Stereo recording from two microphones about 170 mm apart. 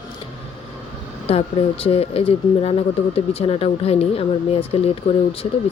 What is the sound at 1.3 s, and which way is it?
Speech, 35° left (ahead or behind).